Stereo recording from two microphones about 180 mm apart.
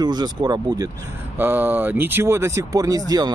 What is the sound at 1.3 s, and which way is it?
Speech, 10° right (ahead or behind).